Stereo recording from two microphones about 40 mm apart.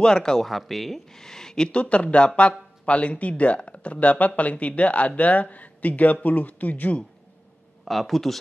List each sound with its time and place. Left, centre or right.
0.0 s speech: centre
0.5 s speech: centre
1.2 s speech: centre
1.7 s speech: left
7.8 s speech: centre